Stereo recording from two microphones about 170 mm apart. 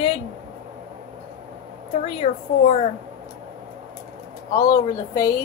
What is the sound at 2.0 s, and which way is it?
Speech, 35° left (ahead or behind).